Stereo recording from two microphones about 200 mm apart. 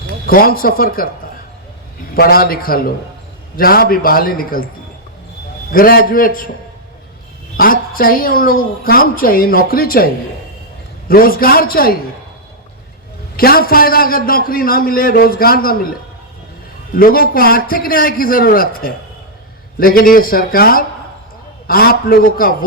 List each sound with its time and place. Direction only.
0.3 s a man's voice: 45° left (ahead or behind)
2.1 s a man's voice: 50° left (ahead or behind)
5.7 s a man's voice: 45° left (ahead or behind)
7.5 s a man's voice: 45° left (ahead or behind)
11.1 s a man's voice: 45° left (ahead or behind)
13.3 s a man's voice: 45° left (ahead or behind)
17.0 s a man's voice: 45° left (ahead or behind)